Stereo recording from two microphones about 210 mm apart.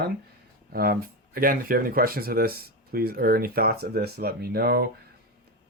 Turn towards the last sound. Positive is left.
turn(degrees=-50)  # may be behind; listen again after turning